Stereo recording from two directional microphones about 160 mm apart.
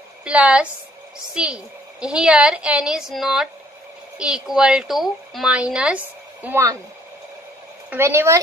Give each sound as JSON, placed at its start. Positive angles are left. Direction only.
{"t": 0.2, "sound": "speech", "side_deg": -5}
{"t": 7.9, "sound": "speech", "side_deg": -15}